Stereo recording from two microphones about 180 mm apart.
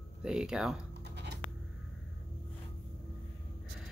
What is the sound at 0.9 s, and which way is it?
Writing, 70° right (ahead or behind).